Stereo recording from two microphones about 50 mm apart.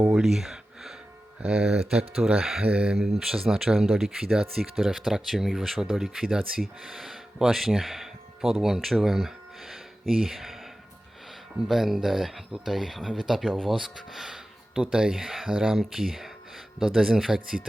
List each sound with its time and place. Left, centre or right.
0.1 s a sound: centre
1.5 s speech: centre
2.6 s speech: right
2.9 s speech: centre
9.0 s a sound: centre
11.7 s speech: centre
14.8 s speech: centre
15.7 s speech: centre